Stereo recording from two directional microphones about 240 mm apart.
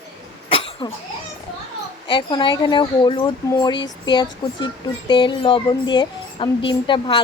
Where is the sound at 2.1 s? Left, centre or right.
Centre.